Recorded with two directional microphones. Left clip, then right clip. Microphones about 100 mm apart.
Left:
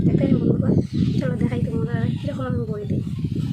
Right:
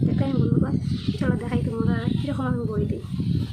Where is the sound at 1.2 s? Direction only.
30° right (ahead or behind).